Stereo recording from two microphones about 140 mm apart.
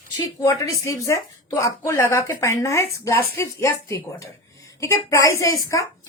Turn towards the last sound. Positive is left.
turn(degrees=25)  # may be behind; listen again after turning